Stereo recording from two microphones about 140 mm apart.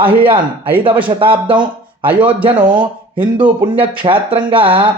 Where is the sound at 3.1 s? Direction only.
10° right (ahead or behind).